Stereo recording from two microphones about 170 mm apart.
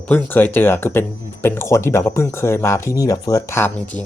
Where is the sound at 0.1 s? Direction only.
10° left (ahead or behind).